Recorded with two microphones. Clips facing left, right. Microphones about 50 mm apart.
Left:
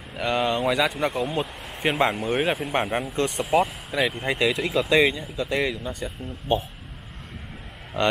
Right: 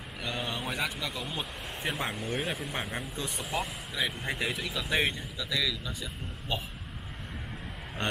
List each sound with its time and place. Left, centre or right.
0.2 s a man's voice: left
5.8 s speech: left